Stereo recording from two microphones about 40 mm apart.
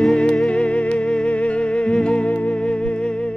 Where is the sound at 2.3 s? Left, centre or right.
Left.